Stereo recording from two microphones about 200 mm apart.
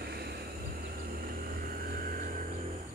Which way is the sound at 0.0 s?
50° right (ahead or behind).